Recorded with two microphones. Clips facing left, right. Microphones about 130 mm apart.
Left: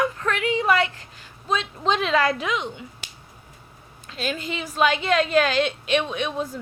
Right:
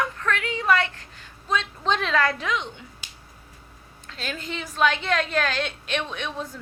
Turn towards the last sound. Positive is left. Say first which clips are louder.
# left 5 dB
turn(degrees=10)  # may be behind; listen again after turning